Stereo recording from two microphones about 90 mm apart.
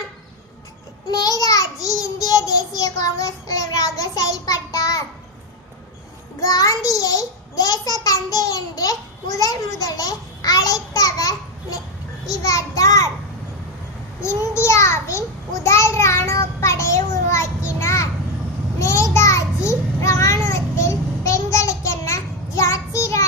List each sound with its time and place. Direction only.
1.1 s child singing: 45° left (ahead or behind)
6.4 s child singing: 45° left (ahead or behind)
8.0 s a child's voice: 40° left (ahead or behind)
12.2 s child singing: 40° left (ahead or behind)
14.2 s child singing: 30° left (ahead or behind)
18.8 s a sound: 35° left (ahead or behind)